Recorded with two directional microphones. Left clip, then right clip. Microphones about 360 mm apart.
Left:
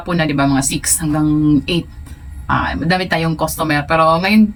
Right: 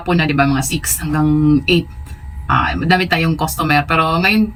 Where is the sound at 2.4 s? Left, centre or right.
Centre.